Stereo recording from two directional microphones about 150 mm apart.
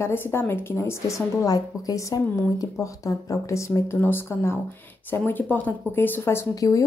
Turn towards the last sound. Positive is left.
turn(degrees=20)  # may be behind; listen again after turning